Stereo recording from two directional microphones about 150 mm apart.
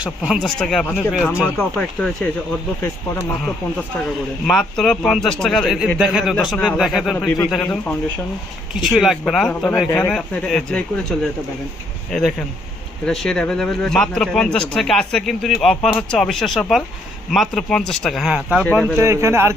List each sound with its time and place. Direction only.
0.0 s speech: 5° right (ahead or behind)
1.3 s speech: 15° left (ahead or behind)
2.0 s speech: 5° left (ahead or behind)
4.4 s speech: 5° left (ahead or behind)
18.9 s speech: 20° right (ahead or behind)